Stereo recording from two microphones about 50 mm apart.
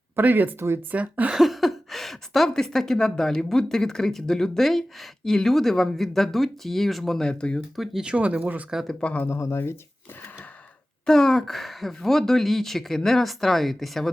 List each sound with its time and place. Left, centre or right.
0.2 s speech: right
1.4 s a sound: centre
2.5 s speech: centre
7.3 s speech: centre
8.0 s speech: right
9.0 s speech: left
9.2 s speech: left
11.0 s speech: centre